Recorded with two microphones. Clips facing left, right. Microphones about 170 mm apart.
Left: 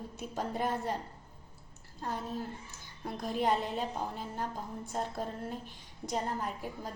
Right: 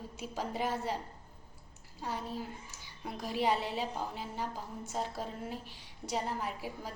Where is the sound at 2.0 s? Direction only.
10° right (ahead or behind).